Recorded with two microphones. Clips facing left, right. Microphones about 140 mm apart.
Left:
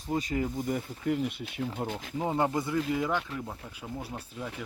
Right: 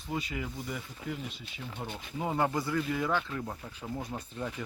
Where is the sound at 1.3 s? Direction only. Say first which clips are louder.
Left 9 dB; 60° left (ahead or behind).